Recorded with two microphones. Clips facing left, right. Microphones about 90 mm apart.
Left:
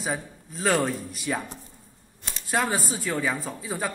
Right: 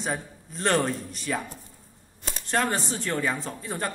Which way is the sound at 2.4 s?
5° left (ahead or behind).